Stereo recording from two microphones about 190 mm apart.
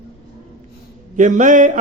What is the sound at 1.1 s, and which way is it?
Speech, 40° right (ahead or behind).